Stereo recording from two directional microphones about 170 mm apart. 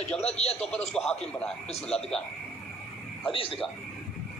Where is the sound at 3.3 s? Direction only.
30° left (ahead or behind).